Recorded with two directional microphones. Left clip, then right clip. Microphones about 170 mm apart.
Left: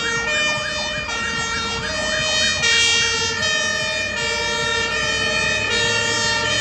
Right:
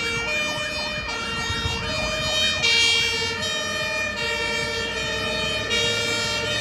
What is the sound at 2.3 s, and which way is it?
Emergency vehicle, centre (ahead or behind).